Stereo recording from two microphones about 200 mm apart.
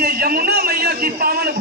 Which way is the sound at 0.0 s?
45° right (ahead or behind).